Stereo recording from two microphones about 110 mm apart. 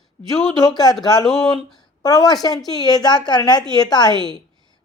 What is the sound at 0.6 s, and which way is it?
Speech, 35° left (ahead or behind).